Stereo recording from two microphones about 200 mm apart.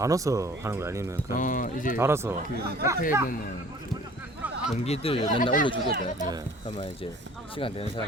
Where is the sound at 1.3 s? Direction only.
40° left (ahead or behind).